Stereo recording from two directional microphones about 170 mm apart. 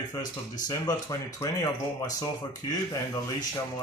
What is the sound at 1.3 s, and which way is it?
Speech, 20° left (ahead or behind).